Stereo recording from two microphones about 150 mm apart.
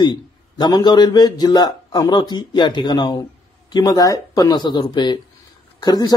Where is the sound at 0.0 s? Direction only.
30° left (ahead or behind).